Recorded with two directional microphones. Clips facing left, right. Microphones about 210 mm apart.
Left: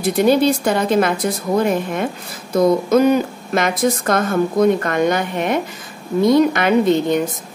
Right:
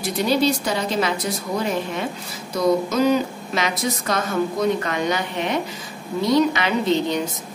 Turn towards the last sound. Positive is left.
turn(degrees=50)  # may be behind; listen again after turning